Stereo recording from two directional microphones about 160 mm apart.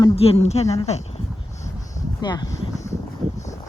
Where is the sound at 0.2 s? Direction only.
40° left (ahead or behind).